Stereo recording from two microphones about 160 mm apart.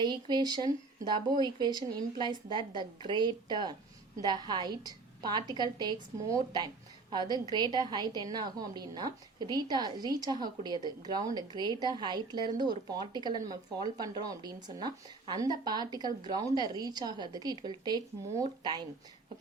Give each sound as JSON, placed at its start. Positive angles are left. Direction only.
{"t": 0.0, "sound": "a woman's voice", "side_deg": -30}